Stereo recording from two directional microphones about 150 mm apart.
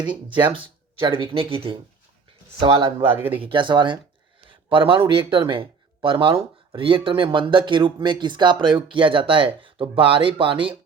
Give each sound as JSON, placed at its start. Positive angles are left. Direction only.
{"t": 0.5, "sound": "speech", "side_deg": -35}
{"t": 3.2, "sound": "speech", "side_deg": -15}
{"t": 3.4, "sound": "speech", "side_deg": -35}